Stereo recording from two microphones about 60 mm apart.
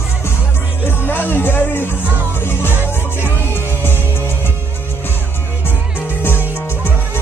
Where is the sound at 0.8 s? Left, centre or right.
Left.